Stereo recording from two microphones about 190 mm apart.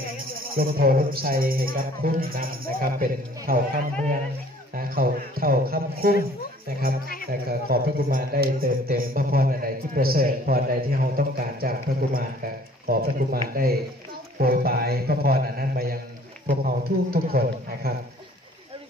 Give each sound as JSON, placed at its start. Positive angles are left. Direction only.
{"t": 0.6, "sound": "a man's voice", "side_deg": -50}
{"t": 7.4, "sound": "a man's voice", "side_deg": -50}